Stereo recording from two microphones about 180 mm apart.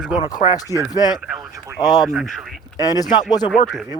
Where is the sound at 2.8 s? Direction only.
20° left (ahead or behind).